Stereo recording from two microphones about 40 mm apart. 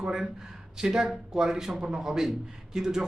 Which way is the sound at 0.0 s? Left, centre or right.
Centre.